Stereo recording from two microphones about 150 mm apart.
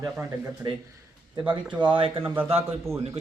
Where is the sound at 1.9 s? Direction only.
35° right (ahead or behind).